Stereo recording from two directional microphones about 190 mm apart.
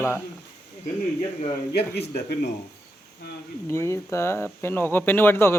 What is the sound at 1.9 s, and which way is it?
Speech, 60° left (ahead or behind).